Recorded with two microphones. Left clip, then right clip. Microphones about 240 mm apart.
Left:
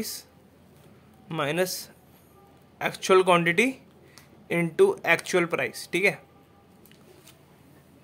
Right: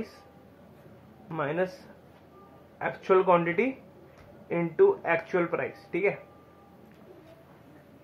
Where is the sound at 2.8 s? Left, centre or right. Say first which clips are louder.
Left 3 dB; left.